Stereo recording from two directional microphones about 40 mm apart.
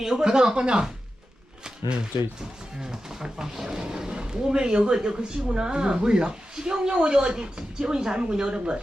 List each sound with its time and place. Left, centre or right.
0.0 s speech: centre
2.8 s speech: centre